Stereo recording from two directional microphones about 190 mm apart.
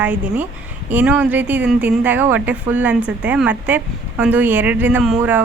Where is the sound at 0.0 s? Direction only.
10° right (ahead or behind).